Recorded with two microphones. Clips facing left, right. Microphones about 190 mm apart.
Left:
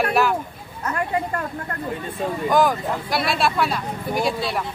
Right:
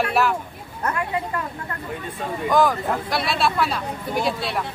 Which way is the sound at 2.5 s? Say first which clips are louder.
Even; centre (ahead or behind).